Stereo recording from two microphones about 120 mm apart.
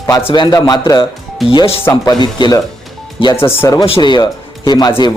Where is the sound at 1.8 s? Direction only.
20° left (ahead or behind).